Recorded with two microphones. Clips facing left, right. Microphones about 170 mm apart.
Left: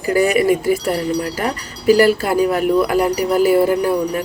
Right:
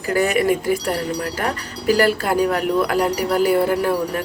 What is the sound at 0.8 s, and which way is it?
Speech, 45° right (ahead or behind).